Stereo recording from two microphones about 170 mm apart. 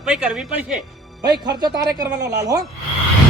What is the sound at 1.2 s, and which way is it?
Speech, 25° right (ahead or behind).